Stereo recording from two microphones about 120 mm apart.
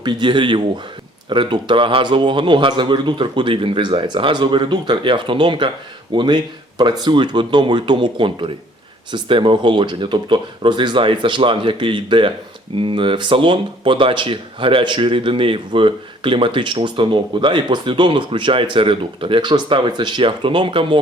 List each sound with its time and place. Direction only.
0.0 s speech: 40° right (ahead or behind)